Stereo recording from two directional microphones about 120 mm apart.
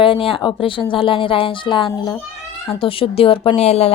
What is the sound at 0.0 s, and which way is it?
A woman's voice, 50° left (ahead or behind).